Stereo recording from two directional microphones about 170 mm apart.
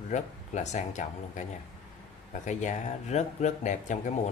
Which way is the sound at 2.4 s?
45° left (ahead or behind).